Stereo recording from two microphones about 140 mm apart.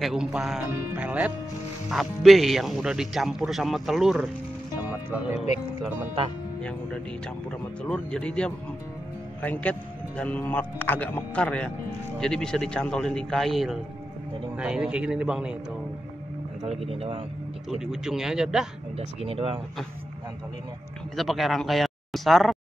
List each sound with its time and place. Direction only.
0.0 s speech: 5° right (ahead or behind)
4.8 s music: 15° right (ahead or behind)
7.8 s a man's voice: 5° left (ahead or behind)
16.9 s speech: 45° right (ahead or behind)
17.6 s speech: 5° right (ahead or behind)
18.9 s speech: 45° right (ahead or behind)
21.2 s speech: centre (ahead or behind)